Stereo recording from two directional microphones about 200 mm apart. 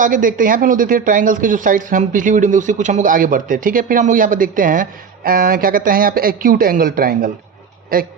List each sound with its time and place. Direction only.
0.0 s speech: 40° right (ahead or behind)